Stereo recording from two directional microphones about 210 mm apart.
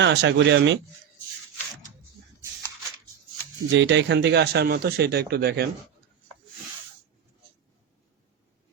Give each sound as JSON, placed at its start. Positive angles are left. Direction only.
{"t": 0.0, "sound": "speech", "side_deg": -55}
{"t": 3.7, "sound": "speech", "side_deg": -60}